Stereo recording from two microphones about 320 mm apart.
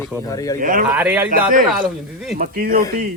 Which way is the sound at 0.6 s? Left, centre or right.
Right.